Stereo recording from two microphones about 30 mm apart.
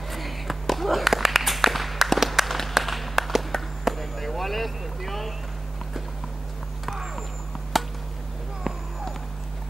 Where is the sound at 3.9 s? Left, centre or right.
Centre.